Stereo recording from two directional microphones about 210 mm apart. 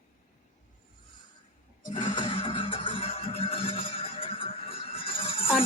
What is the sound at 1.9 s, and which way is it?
Music, 25° left (ahead or behind).